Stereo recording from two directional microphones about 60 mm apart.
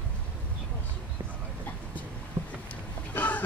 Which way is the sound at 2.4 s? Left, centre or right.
Right.